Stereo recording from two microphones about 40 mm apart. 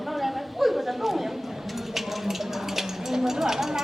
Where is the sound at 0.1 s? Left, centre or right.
Centre.